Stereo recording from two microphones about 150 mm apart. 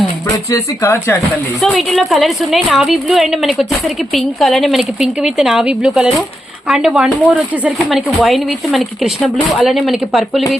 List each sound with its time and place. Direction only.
0.5 s speech: 20° left (ahead or behind)
1.6 s a woman's voice: 5° left (ahead or behind)